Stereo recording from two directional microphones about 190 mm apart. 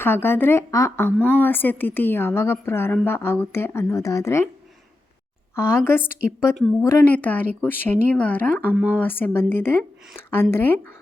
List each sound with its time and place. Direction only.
0.0 s speech: 10° left (ahead or behind)
5.5 s speech: 15° left (ahead or behind)
8.7 s speech: 10° right (ahead or behind)
9.0 s speech: 10° left (ahead or behind)